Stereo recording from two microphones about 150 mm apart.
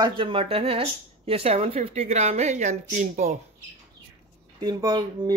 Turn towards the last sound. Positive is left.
turn(degrees=-25)  # may be behind; listen again after turning